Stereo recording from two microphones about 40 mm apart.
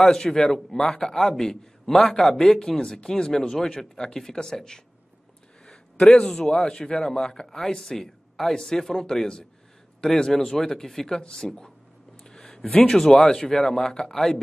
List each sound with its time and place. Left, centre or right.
0.1 s a man's voice: centre
12.2 s a sound: left
12.6 s speech: centre